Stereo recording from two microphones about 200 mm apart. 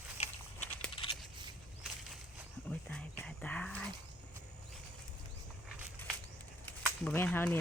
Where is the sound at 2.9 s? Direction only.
5° left (ahead or behind).